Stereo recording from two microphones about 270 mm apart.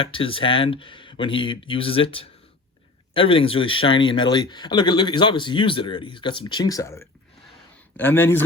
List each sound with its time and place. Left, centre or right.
0.0 s a man's voice: centre